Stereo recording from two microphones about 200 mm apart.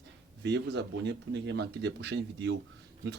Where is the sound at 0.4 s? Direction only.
60° right (ahead or behind).